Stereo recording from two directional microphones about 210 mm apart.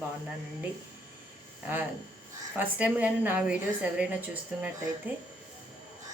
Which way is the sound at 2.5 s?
10° right (ahead or behind).